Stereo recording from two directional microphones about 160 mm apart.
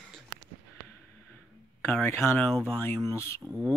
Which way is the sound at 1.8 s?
15° left (ahead or behind).